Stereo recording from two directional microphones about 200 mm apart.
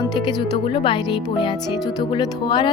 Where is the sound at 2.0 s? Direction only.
25° left (ahead or behind).